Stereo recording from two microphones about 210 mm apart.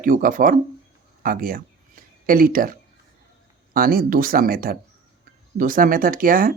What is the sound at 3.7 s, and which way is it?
Speech, 45° right (ahead or behind).